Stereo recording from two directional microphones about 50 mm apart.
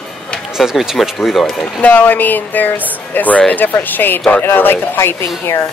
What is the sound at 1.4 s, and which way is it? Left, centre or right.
Speech, centre.